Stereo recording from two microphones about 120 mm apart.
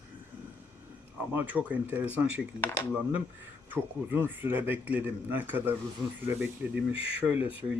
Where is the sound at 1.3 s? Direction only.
15° right (ahead or behind).